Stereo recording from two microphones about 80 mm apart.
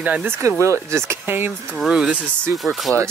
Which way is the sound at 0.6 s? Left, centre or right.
Right.